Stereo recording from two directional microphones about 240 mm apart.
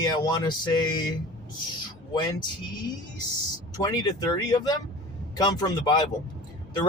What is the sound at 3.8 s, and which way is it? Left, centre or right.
Speech, centre.